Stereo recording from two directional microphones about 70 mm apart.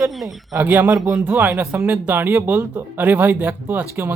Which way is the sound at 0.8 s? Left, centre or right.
Right.